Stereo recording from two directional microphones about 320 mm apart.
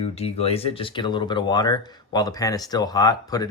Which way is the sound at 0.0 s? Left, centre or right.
Centre.